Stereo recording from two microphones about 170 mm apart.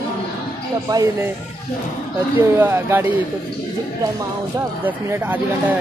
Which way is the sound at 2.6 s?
15° right (ahead or behind).